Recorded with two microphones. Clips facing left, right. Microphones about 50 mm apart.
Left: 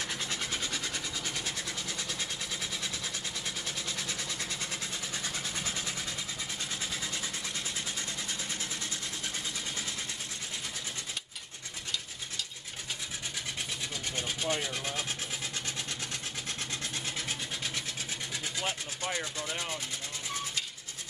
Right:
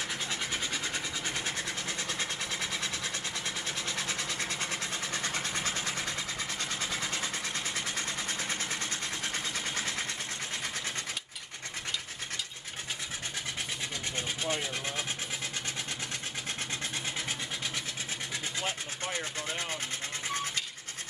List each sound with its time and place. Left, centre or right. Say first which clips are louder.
0.3 s train: right 1 dB; right
2.0 s sewing machine: right 3 dB; right
4.1 s vehicle: right 3 dB; right
9.3 s vehicle: right 3 dB; right
14.4 s speech: left 1 dB; centre